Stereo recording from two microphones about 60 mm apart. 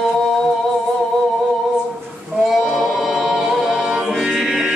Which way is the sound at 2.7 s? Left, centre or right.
Centre.